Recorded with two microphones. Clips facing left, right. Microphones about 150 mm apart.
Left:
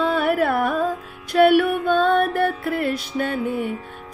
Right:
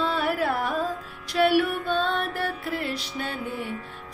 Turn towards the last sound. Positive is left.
turn(degrees=55)  # may be behind; listen again after turning